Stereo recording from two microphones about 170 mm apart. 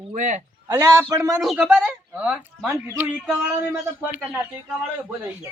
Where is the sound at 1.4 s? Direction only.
Centre (ahead or behind).